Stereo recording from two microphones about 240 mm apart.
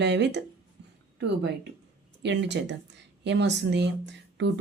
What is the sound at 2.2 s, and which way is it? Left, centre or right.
Speech, right.